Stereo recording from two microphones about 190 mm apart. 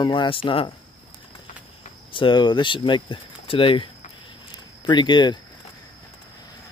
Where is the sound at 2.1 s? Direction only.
25° left (ahead or behind).